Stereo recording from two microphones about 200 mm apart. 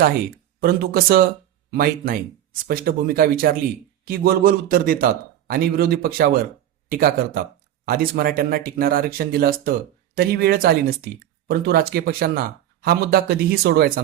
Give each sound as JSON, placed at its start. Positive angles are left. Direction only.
{"t": 0.6, "sound": "a man's voice", "side_deg": -50}